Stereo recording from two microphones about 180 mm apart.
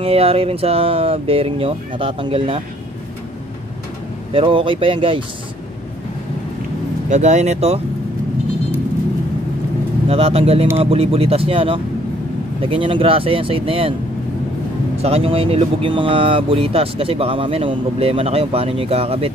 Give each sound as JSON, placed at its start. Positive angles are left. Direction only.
{"t": 0.0, "sound": "speech", "side_deg": -35}
{"t": 4.3, "sound": "speech", "side_deg": -30}
{"t": 7.1, "sound": "speech", "side_deg": -40}
{"t": 10.0, "sound": "speech", "side_deg": -35}
{"t": 15.0, "sound": "speech", "side_deg": -35}